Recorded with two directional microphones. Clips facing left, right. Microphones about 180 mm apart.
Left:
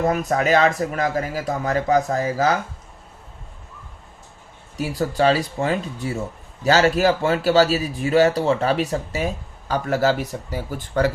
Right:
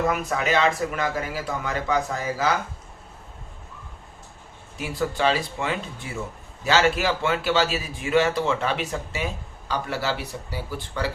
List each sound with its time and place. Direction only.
0.0 s speech: 40° left (ahead or behind)
4.8 s speech: 40° left (ahead or behind)